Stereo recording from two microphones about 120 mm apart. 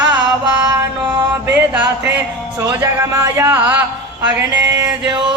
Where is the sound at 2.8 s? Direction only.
20° right (ahead or behind).